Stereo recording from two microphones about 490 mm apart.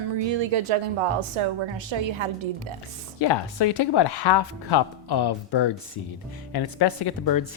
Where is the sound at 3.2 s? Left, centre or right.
Left.